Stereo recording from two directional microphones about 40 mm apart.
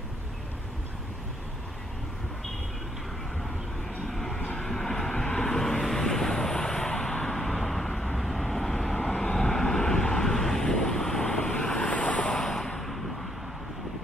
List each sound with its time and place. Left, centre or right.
4.1 s vehicle: centre
9.1 s vehicle: centre
12.4 s a sound: centre